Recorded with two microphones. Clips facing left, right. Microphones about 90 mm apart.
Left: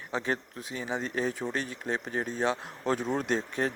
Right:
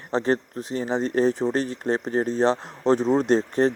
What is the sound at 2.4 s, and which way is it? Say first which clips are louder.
Speech: right 8 dB; 30° right (ahead or behind).